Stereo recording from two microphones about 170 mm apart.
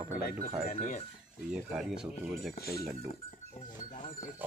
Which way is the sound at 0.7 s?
45° left (ahead or behind).